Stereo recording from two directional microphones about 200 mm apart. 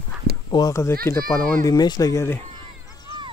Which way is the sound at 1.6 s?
20° left (ahead or behind).